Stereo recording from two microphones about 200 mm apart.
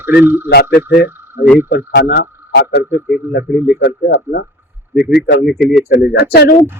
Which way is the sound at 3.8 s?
50° left (ahead or behind).